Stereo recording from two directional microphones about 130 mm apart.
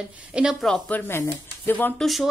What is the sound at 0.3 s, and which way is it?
Speech, 5° right (ahead or behind).